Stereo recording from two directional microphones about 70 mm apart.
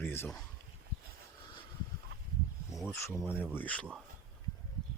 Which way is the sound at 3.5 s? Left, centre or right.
Left.